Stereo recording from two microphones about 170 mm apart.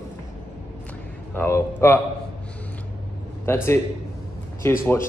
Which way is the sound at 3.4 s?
15° left (ahead or behind).